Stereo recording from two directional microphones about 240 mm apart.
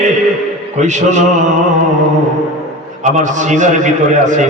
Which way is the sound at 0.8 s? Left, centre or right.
Right.